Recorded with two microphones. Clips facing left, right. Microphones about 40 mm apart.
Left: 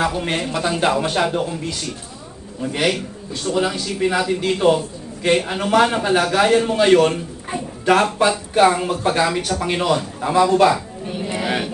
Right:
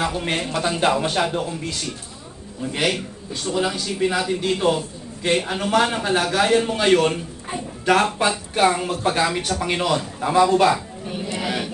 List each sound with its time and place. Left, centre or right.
0.0 s a man's voice: centre
3.5 s a man's voice: centre
11.2 s a sound: left